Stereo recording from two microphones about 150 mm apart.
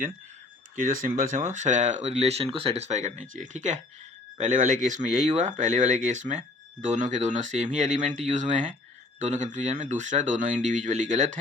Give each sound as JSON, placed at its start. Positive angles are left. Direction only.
{"t": 0.8, "sound": "speech", "side_deg": -65}